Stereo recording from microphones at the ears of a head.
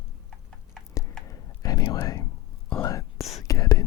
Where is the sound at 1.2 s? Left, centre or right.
Left.